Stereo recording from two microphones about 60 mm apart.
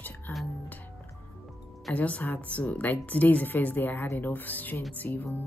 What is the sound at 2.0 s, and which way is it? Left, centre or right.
A woman's voice, left.